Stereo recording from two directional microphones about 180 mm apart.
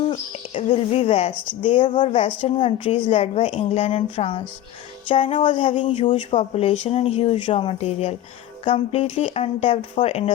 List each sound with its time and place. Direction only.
0.1 s a woman's voice: 30° left (ahead or behind)